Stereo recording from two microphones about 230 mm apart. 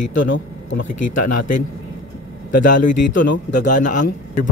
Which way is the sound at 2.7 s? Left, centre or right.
Left.